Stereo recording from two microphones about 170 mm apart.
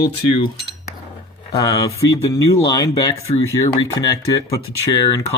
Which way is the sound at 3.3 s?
30° left (ahead or behind).